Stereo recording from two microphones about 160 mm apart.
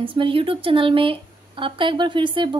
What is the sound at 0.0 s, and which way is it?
A woman's voice, 30° right (ahead or behind).